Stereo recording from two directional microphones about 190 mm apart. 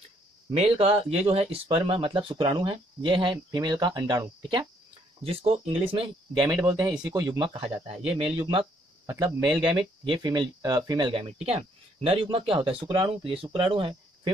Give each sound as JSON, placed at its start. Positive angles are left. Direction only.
{"t": 0.5, "sound": "speech", "side_deg": -30}
{"t": 6.5, "sound": "speech", "side_deg": -20}
{"t": 9.0, "sound": "speech", "side_deg": -15}